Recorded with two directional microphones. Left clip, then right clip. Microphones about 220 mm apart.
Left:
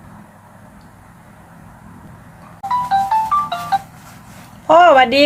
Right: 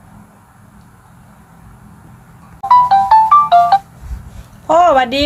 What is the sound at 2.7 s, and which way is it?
Music, 45° right (ahead or behind).